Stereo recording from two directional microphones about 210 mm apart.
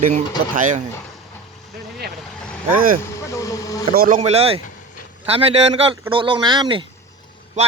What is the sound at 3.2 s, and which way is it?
Vehicle, 15° left (ahead or behind).